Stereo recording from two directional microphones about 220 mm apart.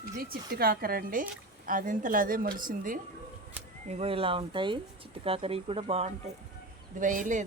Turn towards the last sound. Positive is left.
turn(degrees=-35)  # may be behind; listen again after turning